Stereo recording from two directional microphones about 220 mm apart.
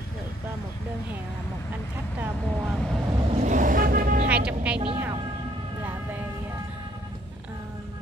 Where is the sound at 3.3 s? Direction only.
35° right (ahead or behind).